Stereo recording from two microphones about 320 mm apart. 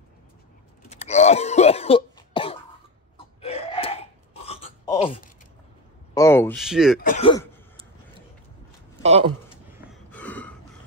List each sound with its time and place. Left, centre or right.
0.8 s cough: left
3.3 s a sound: centre
6.1 s a sound: centre
7.0 s speech: left
9.0 s speech: centre
10.1 s gasp: centre